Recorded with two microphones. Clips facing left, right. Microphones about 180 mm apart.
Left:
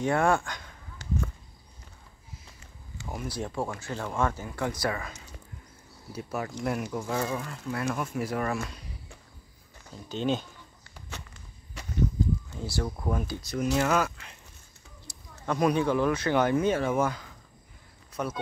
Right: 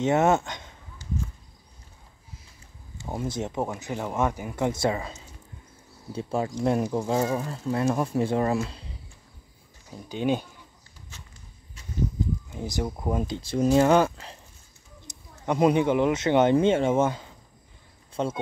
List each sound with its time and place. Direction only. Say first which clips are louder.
0.0 s speech: right 3 dB; 20° right (ahead or behind)
3.1 s speech: right 4 dB; 25° right (ahead or behind)
10.0 s speech: right 3 dB; 10° right (ahead or behind)
11.8 s a sound: left 4 dB; 75° left (ahead or behind)
12.5 s speech: right 2 dB; 20° right (ahead or behind)
15.0 s speech: right 3 dB; 20° right (ahead or behind)